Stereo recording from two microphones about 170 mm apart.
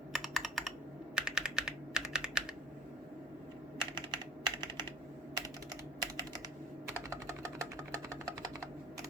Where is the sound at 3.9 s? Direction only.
25° right (ahead or behind).